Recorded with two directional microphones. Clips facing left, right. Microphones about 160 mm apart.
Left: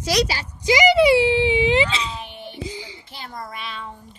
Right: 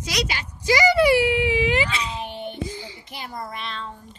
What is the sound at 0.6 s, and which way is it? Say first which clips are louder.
Speech: left 2 dB; 20° left (ahead or behind).